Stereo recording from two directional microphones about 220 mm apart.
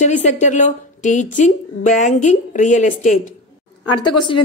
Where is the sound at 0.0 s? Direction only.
35° left (ahead or behind).